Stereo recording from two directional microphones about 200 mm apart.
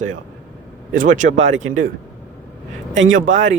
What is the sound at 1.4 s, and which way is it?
Speech, 75° right (ahead or behind).